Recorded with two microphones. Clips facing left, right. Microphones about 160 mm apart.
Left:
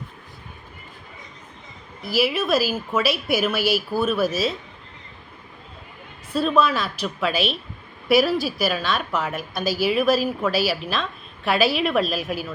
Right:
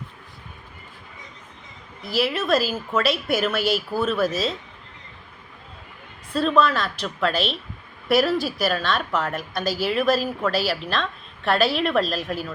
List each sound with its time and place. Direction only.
2.0 s speech: 5° left (ahead or behind)
6.3 s a woman's voice: 5° left (ahead or behind)